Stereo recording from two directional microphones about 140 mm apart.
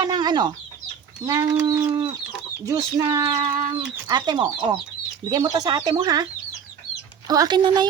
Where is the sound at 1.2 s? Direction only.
20° right (ahead or behind).